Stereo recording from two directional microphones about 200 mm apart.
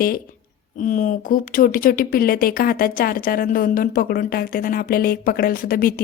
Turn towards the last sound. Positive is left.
turn(degrees=45)  # may be behind; listen again after turning